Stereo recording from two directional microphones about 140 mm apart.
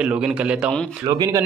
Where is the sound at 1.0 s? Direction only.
30° right (ahead or behind).